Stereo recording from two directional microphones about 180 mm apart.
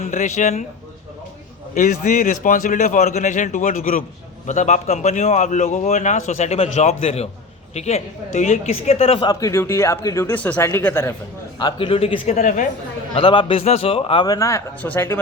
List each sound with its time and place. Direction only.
0.0 s a man's voice: 45° left (ahead or behind)
1.7 s a man's voice: 45° left (ahead or behind); by 11.1 s 15° left (ahead or behind)
11.6 s a man's voice: 30° left (ahead or behind)
13.1 s a man's voice: 25° left (ahead or behind)